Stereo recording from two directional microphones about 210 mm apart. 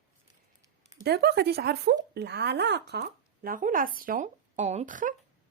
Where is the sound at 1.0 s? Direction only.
50° right (ahead or behind).